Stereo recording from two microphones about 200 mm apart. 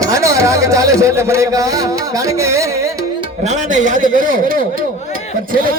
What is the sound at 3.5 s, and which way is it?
A man's voice, 40° right (ahead or behind).